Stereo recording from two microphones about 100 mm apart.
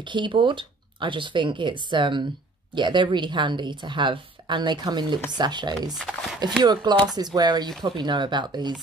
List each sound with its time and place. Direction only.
0.0 s a woman's voice: 55° right (ahead or behind)
5.9 s speech: 5° right (ahead or behind)
6.6 s a woman's voice: 45° right (ahead or behind)